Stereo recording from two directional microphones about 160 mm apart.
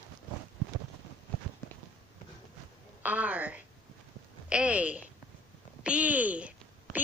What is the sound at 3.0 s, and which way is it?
A woman's voice, 10° right (ahead or behind).